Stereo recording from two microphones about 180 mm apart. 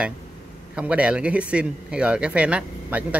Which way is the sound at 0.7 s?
5° right (ahead or behind).